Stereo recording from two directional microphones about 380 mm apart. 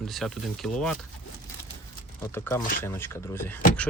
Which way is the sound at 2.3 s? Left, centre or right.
Centre.